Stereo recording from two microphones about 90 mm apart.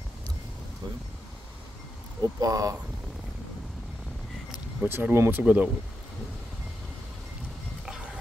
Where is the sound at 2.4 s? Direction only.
40° right (ahead or behind).